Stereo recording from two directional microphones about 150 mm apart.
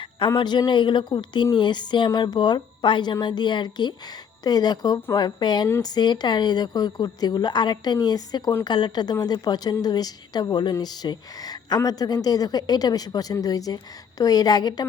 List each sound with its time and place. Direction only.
0.3 s a woman's voice: 30° left (ahead or behind)